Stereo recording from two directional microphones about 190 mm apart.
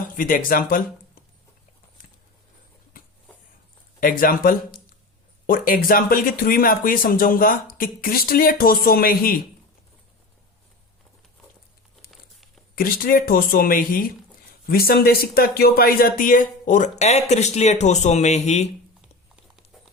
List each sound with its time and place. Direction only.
0.2 s speech: 45° left (ahead or behind)
4.0 s speech: 45° left (ahead or behind)
12.7 s speech: 50° left (ahead or behind)